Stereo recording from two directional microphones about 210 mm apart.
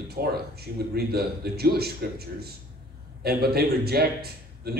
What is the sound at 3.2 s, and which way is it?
A man's voice, 50° right (ahead or behind).